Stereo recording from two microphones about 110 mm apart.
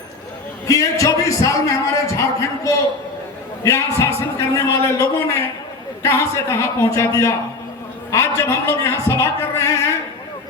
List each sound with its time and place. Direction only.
0.7 s a man's voice: 30° left (ahead or behind)
3.6 s a man's voice: 30° left (ahead or behind)